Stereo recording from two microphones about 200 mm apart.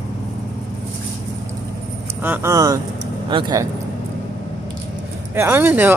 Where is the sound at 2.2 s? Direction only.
10° right (ahead or behind).